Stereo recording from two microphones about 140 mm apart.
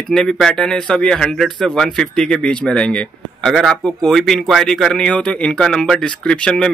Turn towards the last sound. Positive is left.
turn(degrees=5)  # may be behind; listen again after turning